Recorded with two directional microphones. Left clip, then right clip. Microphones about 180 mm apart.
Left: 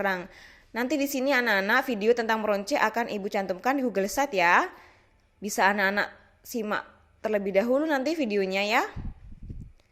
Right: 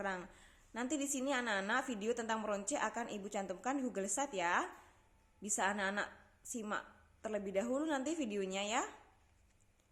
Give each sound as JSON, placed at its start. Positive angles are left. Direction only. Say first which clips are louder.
{"t": 0.0, "sound": "a woman's voice", "louder": "left 13 dB", "side_deg": 45}